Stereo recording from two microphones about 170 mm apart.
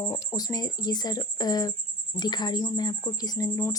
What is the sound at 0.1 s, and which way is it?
Speech, 20° left (ahead or behind).